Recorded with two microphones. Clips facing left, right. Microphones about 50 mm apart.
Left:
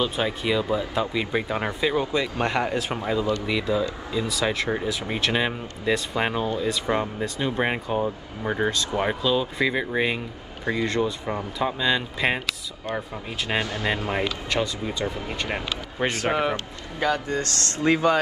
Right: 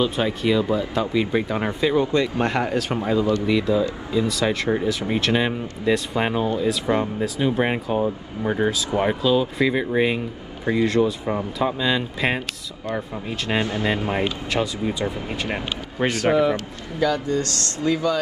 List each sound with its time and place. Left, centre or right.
0.0 s speech: centre
13.6 s speech: right
14.5 s speech: centre
16.1 s a man's voice: left
16.3 s a man's voice: left